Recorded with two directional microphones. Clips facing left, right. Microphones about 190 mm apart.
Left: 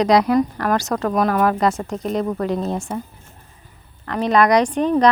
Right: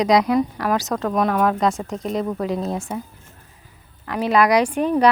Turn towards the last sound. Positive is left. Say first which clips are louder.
# left 1 dB
turn(degrees=-10)  # may be behind; listen again after turning